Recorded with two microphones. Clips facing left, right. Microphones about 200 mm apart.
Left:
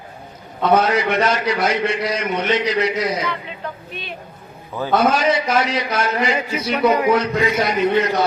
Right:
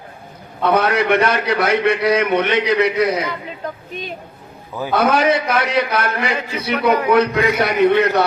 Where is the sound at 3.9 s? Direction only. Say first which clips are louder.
Right 4 dB; 40° right (ahead or behind).